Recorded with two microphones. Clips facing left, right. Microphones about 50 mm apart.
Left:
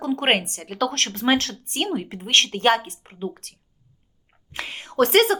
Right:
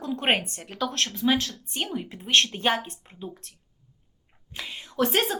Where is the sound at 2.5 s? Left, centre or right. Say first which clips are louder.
Left 6 dB; left.